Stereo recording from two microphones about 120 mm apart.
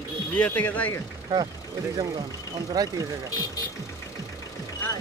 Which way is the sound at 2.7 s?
35° right (ahead or behind).